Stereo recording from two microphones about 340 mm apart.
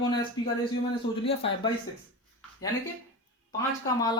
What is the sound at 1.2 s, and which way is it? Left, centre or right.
Speech, centre.